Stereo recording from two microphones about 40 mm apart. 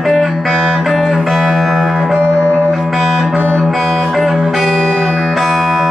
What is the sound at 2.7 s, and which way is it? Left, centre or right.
Music, centre.